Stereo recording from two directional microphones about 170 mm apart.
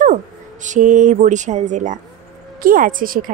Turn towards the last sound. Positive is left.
turn(degrees=-55)  # may be behind; listen again after turning